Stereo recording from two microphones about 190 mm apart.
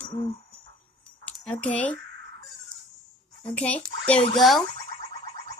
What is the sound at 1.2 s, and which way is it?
Speech, 5° left (ahead or behind).